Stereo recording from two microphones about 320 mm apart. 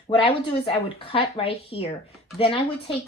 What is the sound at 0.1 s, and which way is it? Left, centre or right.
Speech, centre.